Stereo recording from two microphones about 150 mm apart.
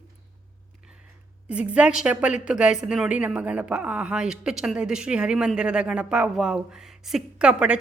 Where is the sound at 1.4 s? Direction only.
10° right (ahead or behind).